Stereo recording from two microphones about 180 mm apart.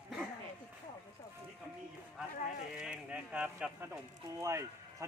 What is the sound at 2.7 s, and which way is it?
Speech, 5° right (ahead or behind).